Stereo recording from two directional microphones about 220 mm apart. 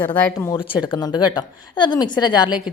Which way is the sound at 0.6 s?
20° left (ahead or behind).